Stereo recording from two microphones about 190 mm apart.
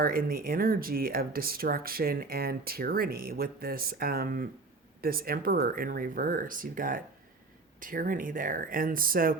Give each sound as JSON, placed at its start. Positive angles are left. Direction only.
{"t": 0.0, "sound": "speech", "side_deg": -50}